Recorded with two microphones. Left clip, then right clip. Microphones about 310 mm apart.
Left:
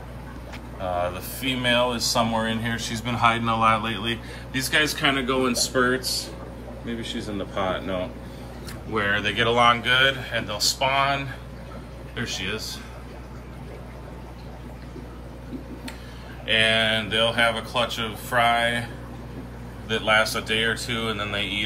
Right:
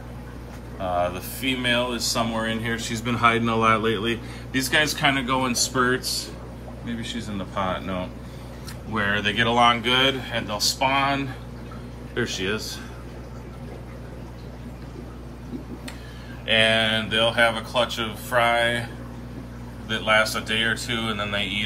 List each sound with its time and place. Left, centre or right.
0.7 s speech: centre
7.3 s speech: right
8.9 s speech: centre
12.3 s speech: centre
16.4 s speech: centre
19.9 s speech: centre